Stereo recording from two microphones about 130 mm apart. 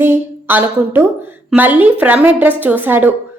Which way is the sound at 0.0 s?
15° right (ahead or behind).